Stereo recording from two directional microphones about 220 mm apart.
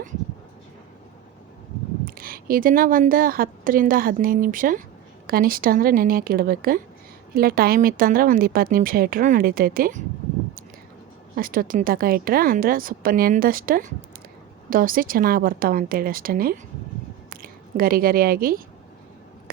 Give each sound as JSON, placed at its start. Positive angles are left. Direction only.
{"t": 2.0, "sound": "a woman's voice", "side_deg": -40}
{"t": 11.3, "sound": "a woman's voice", "side_deg": -40}
{"t": 17.7, "sound": "a woman's voice", "side_deg": -40}